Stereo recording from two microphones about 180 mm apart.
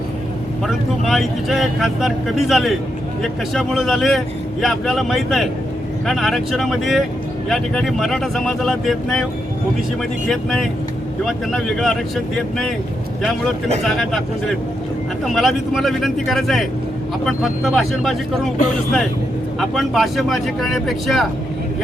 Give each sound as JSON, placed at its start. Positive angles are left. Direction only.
{"t": 0.7, "sound": "speech", "side_deg": 0}
{"t": 10.2, "sound": "speech", "side_deg": 0}
{"t": 13.8, "sound": "speech", "side_deg": 0}
{"t": 19.5, "sound": "speech", "side_deg": 0}